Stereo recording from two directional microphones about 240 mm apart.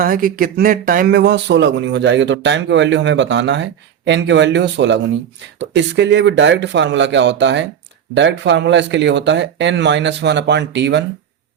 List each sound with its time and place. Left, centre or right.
0.0 s speech: right